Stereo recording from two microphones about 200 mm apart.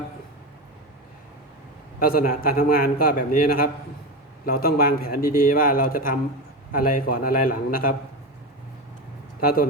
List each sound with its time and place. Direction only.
2.0 s a man's voice: 45° left (ahead or behind)
9.4 s a man's voice: 50° left (ahead or behind)